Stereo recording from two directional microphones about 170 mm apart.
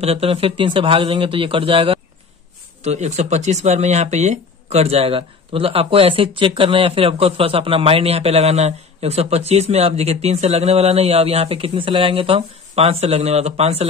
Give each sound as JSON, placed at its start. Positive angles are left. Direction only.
{"t": 0.0, "sound": "speech", "side_deg": -35}